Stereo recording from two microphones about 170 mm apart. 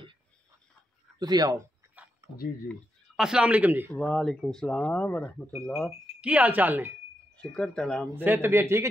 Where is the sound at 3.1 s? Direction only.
5° right (ahead or behind).